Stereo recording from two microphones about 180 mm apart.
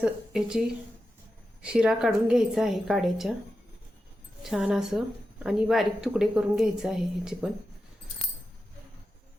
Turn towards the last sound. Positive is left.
turn(degrees=-5)  # may be behind; listen again after turning